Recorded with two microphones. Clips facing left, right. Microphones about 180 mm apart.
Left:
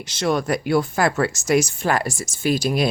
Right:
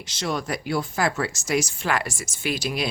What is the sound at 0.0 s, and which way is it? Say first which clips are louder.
Speech: left 6 dB; 60° left (ahead or behind).